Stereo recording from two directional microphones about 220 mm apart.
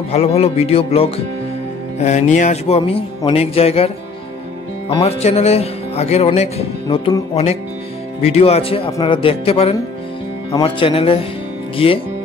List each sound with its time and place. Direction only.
0.1 s speech: 30° left (ahead or behind)
2.0 s music: 30° left (ahead or behind)
2.3 s speech: 30° left (ahead or behind)
8.2 s speech: 30° left (ahead or behind)